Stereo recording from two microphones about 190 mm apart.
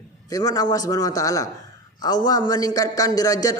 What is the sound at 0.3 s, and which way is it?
A man's voice, 20° left (ahead or behind).